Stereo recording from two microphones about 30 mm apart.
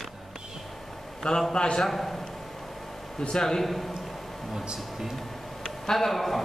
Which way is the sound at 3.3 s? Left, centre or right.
Centre.